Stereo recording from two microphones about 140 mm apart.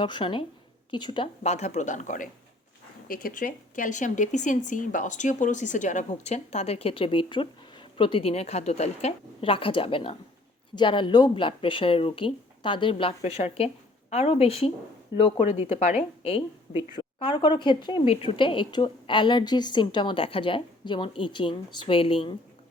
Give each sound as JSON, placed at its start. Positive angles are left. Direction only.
{"t": 0.0, "sound": "a woman's voice", "side_deg": 35}
{"t": 1.5, "sound": "speech", "side_deg": 55}
{"t": 3.1, "sound": "a woman's voice", "side_deg": 90}
{"t": 15.8, "sound": "speech", "side_deg": 55}
{"t": 16.9, "sound": "a woman's voice", "side_deg": 35}